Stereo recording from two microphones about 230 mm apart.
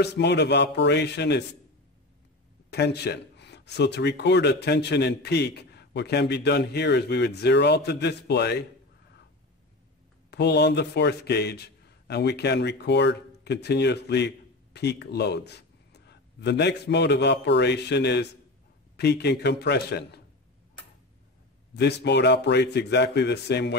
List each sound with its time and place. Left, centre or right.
0.0 s speech: left
2.7 s speech: left
10.3 s a man's voice: left
21.7 s speech: left